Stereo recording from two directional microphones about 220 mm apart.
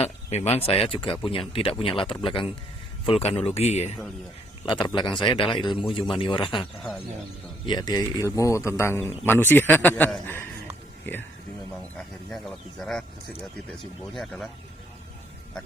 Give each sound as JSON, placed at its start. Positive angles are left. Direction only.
{"t": 0.0, "sound": "speech", "side_deg": 30}
{"t": 7.7, "sound": "speech", "side_deg": 20}